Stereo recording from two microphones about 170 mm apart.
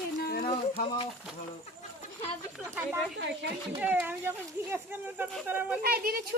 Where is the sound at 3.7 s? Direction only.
10° right (ahead or behind).